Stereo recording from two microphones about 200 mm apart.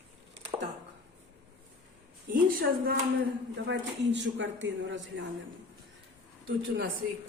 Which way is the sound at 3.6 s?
60° right (ahead or behind).